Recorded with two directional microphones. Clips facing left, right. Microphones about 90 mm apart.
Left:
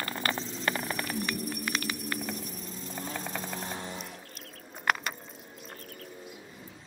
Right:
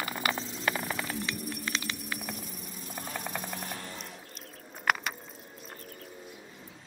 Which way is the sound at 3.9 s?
Centre (ahead or behind).